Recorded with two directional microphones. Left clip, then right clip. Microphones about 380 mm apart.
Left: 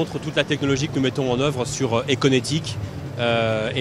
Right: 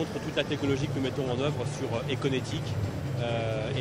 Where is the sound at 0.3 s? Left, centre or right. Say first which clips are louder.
Left 8 dB; left.